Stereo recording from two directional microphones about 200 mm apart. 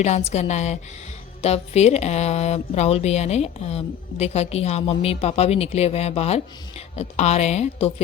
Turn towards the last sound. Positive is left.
turn(degrees=35)  # may be behind; listen again after turning